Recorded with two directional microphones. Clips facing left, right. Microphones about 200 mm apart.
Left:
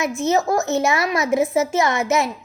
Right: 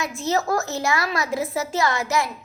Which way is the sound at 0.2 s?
20° left (ahead or behind).